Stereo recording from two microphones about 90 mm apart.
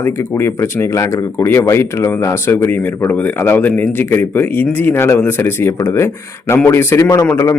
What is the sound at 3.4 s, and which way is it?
Speech, 20° left (ahead or behind).